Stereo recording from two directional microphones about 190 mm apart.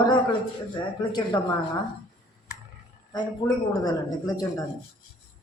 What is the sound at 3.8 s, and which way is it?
Speech, 20° left (ahead or behind).